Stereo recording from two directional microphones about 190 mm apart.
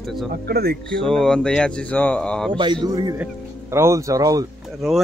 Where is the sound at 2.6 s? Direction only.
25° right (ahead or behind).